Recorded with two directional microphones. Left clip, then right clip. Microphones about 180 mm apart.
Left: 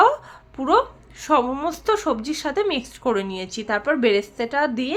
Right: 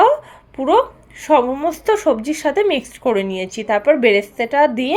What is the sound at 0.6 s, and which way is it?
A woman's voice, 5° right (ahead or behind).